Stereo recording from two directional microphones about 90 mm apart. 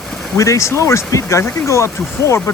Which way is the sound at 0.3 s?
35° left (ahead or behind).